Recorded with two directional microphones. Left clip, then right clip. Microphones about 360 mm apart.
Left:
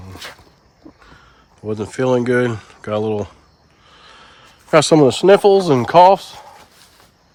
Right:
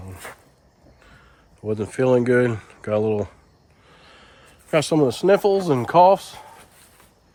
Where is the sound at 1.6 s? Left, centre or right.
Centre.